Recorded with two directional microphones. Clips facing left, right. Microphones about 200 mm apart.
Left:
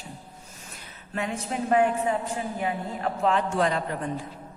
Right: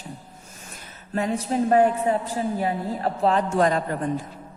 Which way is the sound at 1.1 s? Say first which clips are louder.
Right 6 dB; 35° right (ahead or behind).